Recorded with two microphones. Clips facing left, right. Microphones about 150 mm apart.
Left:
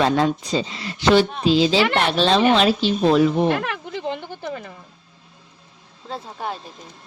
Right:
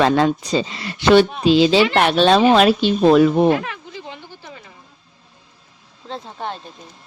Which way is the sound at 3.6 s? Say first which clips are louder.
Left 2 dB; 65° left (ahead or behind).